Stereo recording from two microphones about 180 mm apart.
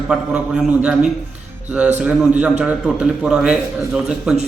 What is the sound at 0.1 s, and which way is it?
A man's voice, 5° right (ahead or behind).